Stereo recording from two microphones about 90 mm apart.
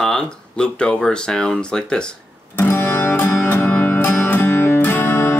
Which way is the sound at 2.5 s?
25° left (ahead or behind).